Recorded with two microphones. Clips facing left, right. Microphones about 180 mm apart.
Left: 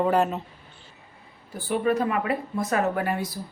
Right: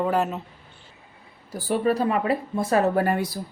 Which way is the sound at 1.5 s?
40° right (ahead or behind).